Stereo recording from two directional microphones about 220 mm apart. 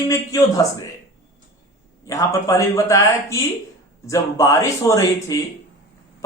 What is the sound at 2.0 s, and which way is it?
A man's voice, 15° left (ahead or behind).